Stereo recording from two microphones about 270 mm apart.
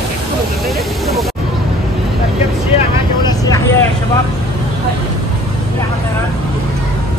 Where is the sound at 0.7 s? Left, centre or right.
Centre.